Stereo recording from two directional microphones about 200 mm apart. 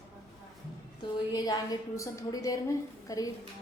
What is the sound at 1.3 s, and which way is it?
A woman's voice, 20° left (ahead or behind).